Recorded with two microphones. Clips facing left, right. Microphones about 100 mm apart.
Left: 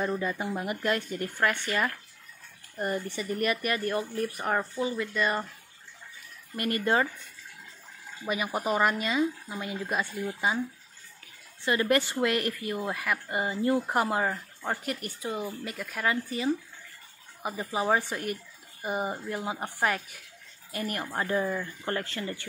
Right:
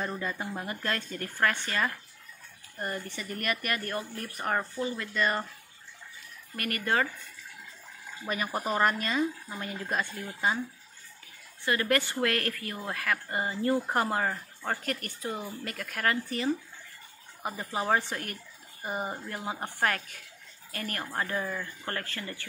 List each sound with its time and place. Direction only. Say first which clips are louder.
0.0 s speech: left 4 dB; 5° left (ahead or behind)
3.2 s speech: left 5 dB; 15° left (ahead or behind)
6.5 s speech: left 3 dB; 20° left (ahead or behind)
8.3 s speech: left 2 dB; 5° left (ahead or behind)
11.6 s speech: left 2 dB; 20° left (ahead or behind)